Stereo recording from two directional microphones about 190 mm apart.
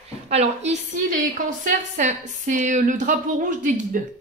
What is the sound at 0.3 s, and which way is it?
A woman's voice, 35° right (ahead or behind).